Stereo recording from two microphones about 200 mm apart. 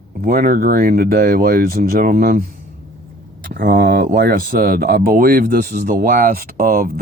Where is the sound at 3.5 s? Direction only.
50° right (ahead or behind).